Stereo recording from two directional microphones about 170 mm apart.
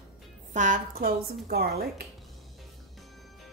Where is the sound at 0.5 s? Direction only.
50° right (ahead or behind).